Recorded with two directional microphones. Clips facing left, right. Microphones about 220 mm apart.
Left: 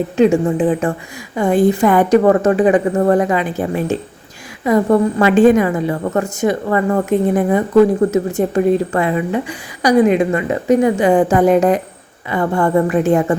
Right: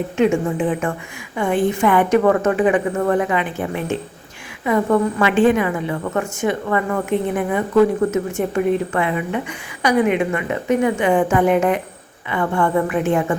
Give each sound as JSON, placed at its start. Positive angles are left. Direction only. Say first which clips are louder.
{"t": 0.2, "sound": "a woman's voice", "louder": "left 5 dB", "side_deg": 35}